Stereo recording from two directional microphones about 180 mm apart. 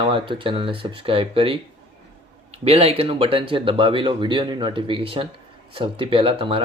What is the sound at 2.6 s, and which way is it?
Speech, 35° right (ahead or behind).